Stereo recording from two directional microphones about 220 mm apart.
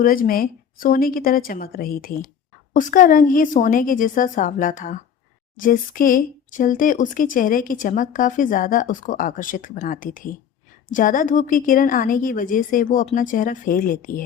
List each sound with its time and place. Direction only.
0.0 s speech: 40° left (ahead or behind)